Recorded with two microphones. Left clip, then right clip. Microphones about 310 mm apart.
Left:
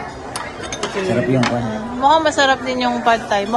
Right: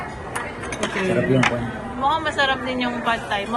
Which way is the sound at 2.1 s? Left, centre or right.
Centre.